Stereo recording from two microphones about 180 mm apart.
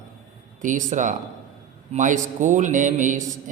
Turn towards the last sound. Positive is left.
turn(degrees=-45)  # may be behind; listen again after turning